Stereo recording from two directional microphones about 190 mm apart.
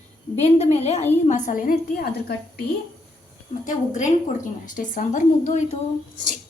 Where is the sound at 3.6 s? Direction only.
40° left (ahead or behind).